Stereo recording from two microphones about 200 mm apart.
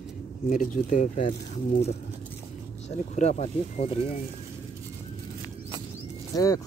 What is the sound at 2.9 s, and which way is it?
Speech, 35° left (ahead or behind).